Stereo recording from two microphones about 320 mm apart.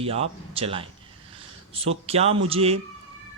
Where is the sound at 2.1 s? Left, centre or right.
Centre.